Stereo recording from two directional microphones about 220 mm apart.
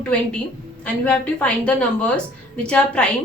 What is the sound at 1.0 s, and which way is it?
A woman's voice, 5° left (ahead or behind).